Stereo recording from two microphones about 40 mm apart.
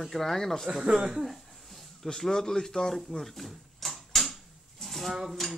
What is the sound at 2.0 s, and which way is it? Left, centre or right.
Speech, centre.